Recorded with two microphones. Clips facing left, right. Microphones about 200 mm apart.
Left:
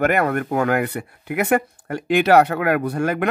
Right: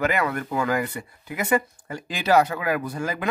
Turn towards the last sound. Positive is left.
turn(degrees=65)  # may be behind; listen again after turning